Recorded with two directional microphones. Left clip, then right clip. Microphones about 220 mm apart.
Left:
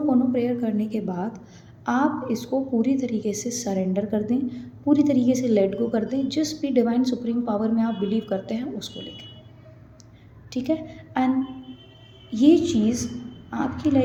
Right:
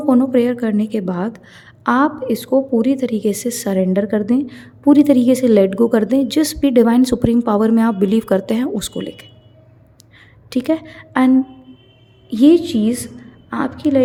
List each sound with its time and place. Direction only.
0.1 s a woman's voice: 45° right (ahead or behind)
10.5 s speech: 40° right (ahead or behind)
12.3 s speech: 40° right (ahead or behind)